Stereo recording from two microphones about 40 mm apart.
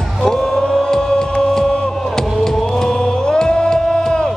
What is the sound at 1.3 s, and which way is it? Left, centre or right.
Music, centre.